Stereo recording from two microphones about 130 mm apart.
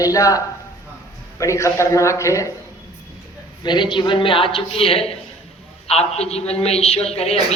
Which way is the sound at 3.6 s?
35° left (ahead or behind).